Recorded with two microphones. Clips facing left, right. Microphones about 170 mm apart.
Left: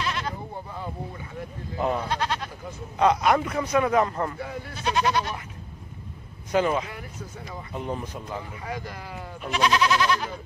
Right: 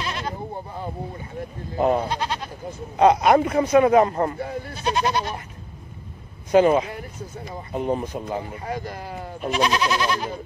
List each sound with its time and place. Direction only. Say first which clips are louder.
0.0 s sheep: even; 30° right (ahead or behind)
1.8 s speech: right 5 dB; 30° right (ahead or behind)
6.5 s speech: right 7 dB; 20° right (ahead or behind)
8.4 s speech: right 5 dB; 35° right (ahead or behind)